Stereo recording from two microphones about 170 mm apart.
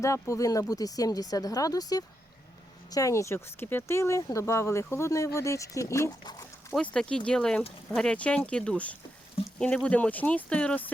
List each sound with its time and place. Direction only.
0.0 s a woman's voice: 20° left (ahead or behind)
6.7 s speech: 5° left (ahead or behind)